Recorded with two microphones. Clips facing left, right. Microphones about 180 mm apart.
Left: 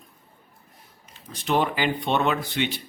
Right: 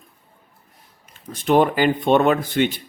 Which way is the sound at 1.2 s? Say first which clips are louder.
Right 7 dB; 50° right (ahead or behind).